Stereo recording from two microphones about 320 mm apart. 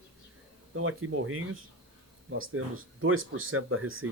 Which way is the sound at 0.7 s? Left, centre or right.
Right.